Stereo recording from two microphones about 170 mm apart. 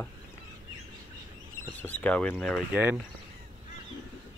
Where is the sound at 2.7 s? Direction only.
10° right (ahead or behind).